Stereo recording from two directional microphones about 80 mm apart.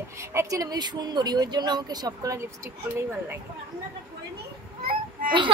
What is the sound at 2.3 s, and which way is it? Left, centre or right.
Speech, right.